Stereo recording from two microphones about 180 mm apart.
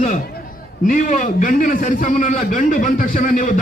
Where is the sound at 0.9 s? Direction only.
45° left (ahead or behind).